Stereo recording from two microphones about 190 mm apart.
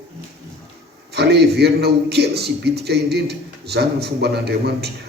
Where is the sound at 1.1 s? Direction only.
60° right (ahead or behind).